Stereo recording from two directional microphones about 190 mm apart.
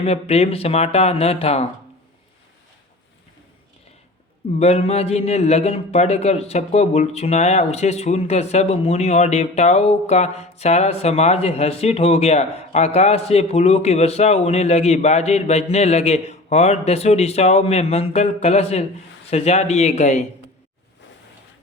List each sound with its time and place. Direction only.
0.0 s a man's voice: 35° left (ahead or behind)
4.6 s a man's voice: 35° left (ahead or behind)